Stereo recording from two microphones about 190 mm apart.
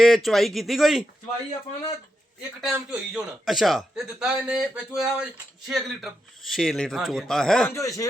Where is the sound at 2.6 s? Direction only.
5° right (ahead or behind).